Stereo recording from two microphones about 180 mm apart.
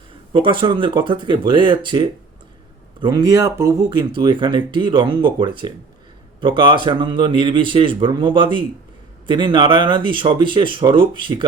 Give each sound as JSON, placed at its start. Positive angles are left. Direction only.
{"t": 0.3, "sound": "speech", "side_deg": -30}